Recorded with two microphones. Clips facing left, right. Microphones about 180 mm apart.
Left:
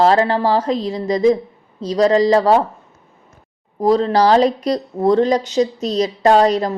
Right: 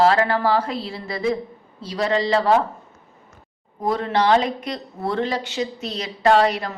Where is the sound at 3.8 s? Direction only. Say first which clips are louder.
Left 7 dB; 35° left (ahead or behind).